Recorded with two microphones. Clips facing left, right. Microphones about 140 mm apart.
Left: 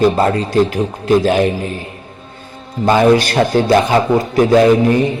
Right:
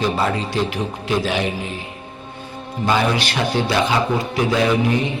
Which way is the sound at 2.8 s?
45° left (ahead or behind).